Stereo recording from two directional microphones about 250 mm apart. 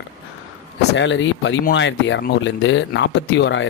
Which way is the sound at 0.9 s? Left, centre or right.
Left.